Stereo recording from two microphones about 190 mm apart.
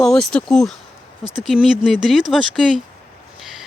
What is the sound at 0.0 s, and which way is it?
Speech, centre (ahead or behind).